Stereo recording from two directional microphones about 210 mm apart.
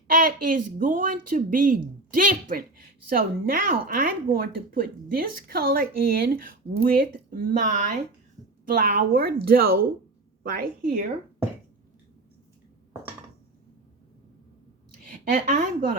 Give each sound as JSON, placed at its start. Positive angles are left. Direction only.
{"t": 0.1, "sound": "speech", "side_deg": -40}
{"t": 15.0, "sound": "a woman's voice", "side_deg": -40}